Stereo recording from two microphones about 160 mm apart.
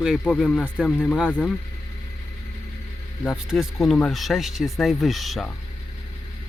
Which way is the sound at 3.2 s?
Centre (ahead or behind).